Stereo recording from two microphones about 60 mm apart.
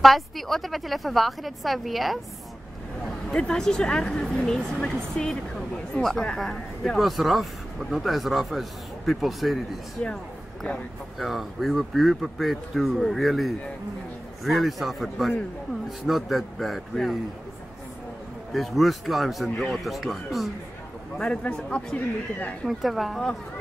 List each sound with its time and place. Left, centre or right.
0.0 s a man's voice: centre
3.3 s speech: centre
7.0 s a man's voice: centre
10.0 s speech: left
11.1 s a man's voice: centre
18.5 s a man's voice: centre
21.2 s speech: centre
22.7 s a man's voice: centre